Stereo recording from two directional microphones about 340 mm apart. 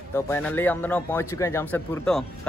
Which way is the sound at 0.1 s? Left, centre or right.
Centre.